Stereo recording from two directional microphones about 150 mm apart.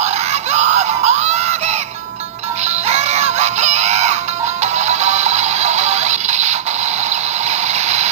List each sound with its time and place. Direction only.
0.0 s synthetic singing: 50° right (ahead or behind)
2.9 s music: 45° right (ahead or behind)